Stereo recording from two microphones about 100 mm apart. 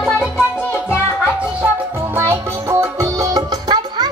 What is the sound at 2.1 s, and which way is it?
Music, 30° right (ahead or behind).